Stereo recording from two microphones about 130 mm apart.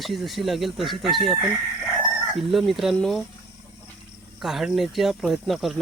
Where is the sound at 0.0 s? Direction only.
Centre (ahead or behind).